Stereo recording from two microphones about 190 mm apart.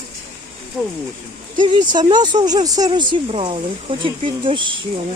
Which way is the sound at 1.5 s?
25° right (ahead or behind).